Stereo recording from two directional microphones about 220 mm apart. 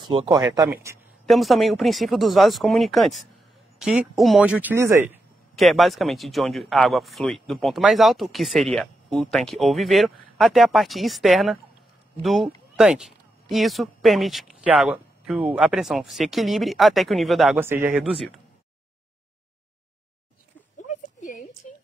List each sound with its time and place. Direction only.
0.0 s speech: 20° right (ahead or behind)
1.2 s speech: centre (ahead or behind)
20.9 s a sound: 35° left (ahead or behind)